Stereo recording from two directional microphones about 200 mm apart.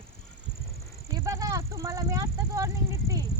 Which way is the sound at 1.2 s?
15° right (ahead or behind).